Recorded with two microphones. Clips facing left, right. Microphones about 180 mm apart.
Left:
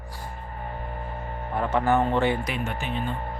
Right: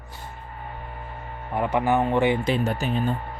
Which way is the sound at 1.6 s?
15° right (ahead or behind).